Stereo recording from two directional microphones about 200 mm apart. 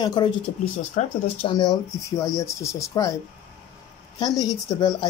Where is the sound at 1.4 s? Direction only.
20° left (ahead or behind).